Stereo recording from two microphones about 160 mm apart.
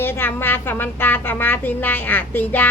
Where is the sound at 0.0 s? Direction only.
15° left (ahead or behind).